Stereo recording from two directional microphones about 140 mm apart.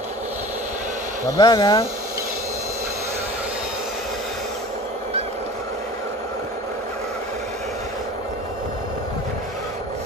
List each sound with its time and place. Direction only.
1.2 s speech: 25° left (ahead or behind)